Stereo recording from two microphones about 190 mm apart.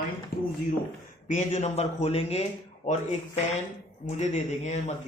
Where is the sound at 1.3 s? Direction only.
40° left (ahead or behind).